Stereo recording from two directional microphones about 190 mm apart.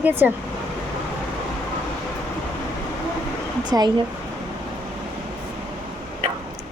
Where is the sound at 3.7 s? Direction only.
20° right (ahead or behind).